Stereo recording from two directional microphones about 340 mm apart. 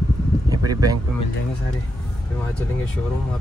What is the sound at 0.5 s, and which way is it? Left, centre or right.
Speech, centre.